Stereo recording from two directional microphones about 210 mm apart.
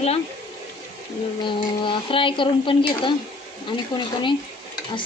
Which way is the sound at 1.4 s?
25° left (ahead or behind).